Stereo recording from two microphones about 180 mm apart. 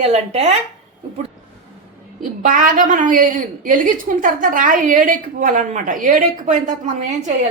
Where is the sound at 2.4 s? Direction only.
50° right (ahead or behind).